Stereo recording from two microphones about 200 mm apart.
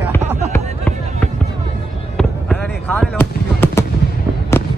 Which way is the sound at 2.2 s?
5° left (ahead or behind).